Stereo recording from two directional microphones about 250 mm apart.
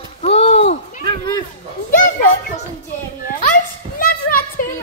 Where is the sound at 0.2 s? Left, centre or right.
Left.